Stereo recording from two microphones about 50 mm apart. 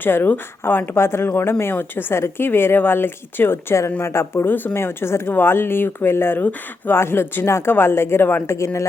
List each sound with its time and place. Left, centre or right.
0.0 s speech: left
0.9 s speech: left
4.0 s speech: left
4.4 s speech: left
8.4 s speech: left